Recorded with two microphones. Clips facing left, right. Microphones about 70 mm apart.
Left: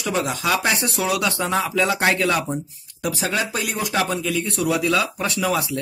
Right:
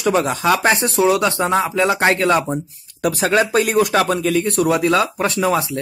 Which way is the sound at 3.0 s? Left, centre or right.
Right.